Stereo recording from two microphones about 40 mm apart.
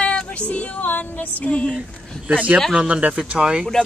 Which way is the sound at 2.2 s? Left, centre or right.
Right.